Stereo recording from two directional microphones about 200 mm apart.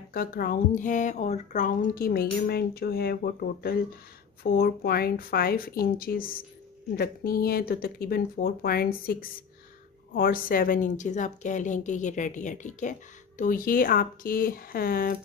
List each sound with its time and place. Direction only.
0.1 s a woman's voice: 45° left (ahead or behind)
1.8 s a woman's voice: 50° left (ahead or behind)